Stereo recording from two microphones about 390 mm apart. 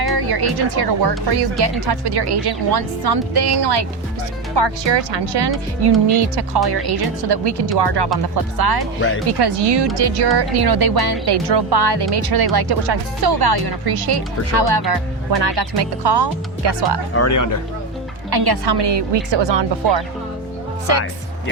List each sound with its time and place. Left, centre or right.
0.0 s speech: right
4.5 s a woman's voice: right
6.1 s speech: right
7.3 s a woman's voice: right
8.4 s speech: right
9.0 s speech: left
9.2 s speech: right
10.0 s speech: right
12.1 s speech: right
17.2 s speech: left
18.3 s a woman's voice: right